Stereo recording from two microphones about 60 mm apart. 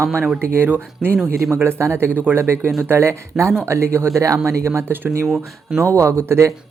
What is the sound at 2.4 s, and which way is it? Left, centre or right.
Speech, right.